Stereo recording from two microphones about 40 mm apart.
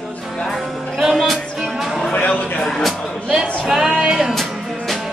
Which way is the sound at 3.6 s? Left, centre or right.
Centre.